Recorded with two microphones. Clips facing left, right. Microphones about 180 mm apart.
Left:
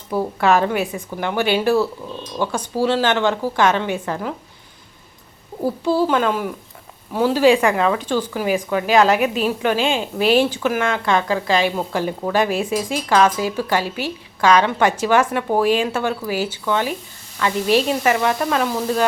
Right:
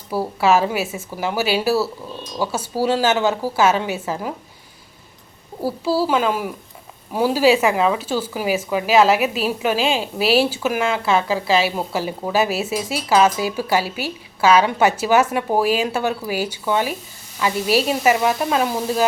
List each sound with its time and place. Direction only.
0.1 s a woman's voice: 5° right (ahead or behind)
5.6 s speech: 5° right (ahead or behind)